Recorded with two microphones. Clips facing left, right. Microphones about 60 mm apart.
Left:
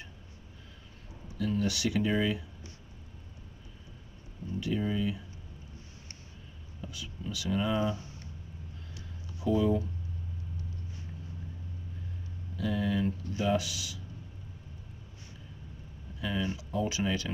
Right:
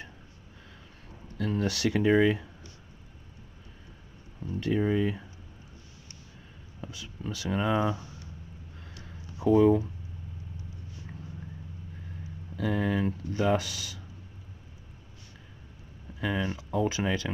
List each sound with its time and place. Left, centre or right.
1.4 s speech: right
4.6 s speech: right
6.8 s a sound: right
7.4 s speech: right
9.4 s speech: right
12.5 s speech: right
16.2 s speech: right